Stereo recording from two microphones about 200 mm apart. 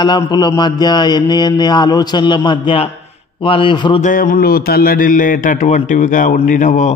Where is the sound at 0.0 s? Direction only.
20° left (ahead or behind).